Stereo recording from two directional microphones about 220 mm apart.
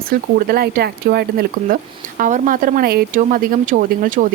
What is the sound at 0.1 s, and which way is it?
Speech, 40° right (ahead or behind).